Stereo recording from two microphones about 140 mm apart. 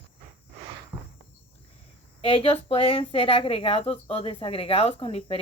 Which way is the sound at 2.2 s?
45° left (ahead or behind).